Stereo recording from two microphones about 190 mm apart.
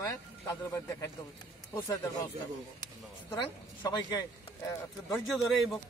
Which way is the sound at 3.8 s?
20° left (ahead or behind).